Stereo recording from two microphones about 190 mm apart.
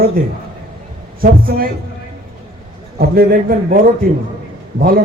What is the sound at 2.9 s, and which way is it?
A man's voice, 50° right (ahead or behind).